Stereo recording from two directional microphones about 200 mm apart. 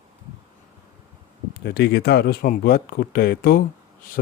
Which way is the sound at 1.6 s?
55° left (ahead or behind).